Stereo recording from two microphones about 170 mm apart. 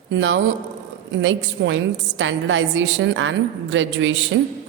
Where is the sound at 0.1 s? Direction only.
90° right.